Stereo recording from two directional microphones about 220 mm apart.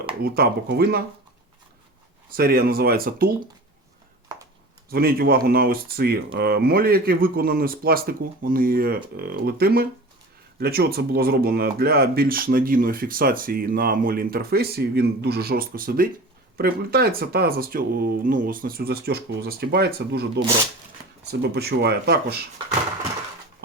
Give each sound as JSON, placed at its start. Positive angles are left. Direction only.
{"t": 0.2, "sound": "speech", "side_deg": -45}
{"t": 2.3, "sound": "speech", "side_deg": -40}
{"t": 4.9, "sound": "speech", "side_deg": -45}